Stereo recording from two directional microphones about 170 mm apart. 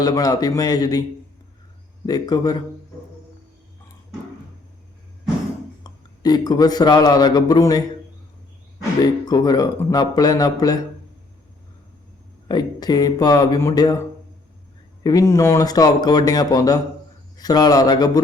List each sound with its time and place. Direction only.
0.0 s speech: 20° left (ahead or behind)
2.0 s speech: 25° left (ahead or behind)
5.8 s a man's voice: 25° left (ahead or behind)
9.2 s speech: 25° left (ahead or behind)
12.5 s speech: 25° left (ahead or behind)
15.0 s speech: 20° left (ahead or behind)